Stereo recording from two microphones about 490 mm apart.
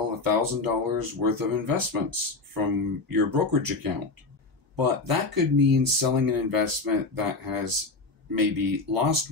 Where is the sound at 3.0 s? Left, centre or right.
Right.